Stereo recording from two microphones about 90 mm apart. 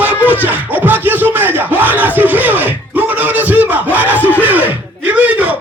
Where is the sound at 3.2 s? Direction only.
20° right (ahead or behind).